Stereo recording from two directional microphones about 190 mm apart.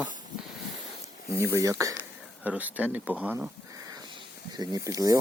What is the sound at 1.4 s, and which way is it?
Speech, 15° right (ahead or behind).